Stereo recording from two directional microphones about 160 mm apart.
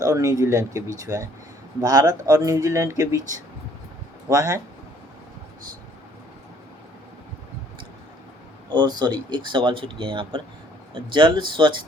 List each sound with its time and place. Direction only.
0.0 s speech: 20° right (ahead or behind)
4.3 s speech: 20° right (ahead or behind)
8.7 s speech: 25° right (ahead or behind)